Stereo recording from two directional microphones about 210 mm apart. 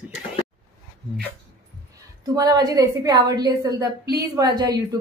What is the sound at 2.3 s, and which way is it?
A woman's voice, 15° right (ahead or behind).